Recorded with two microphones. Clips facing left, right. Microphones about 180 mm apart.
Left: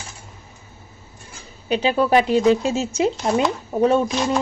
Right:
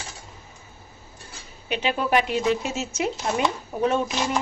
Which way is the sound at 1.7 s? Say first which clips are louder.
Left 6 dB; 35° left (ahead or behind).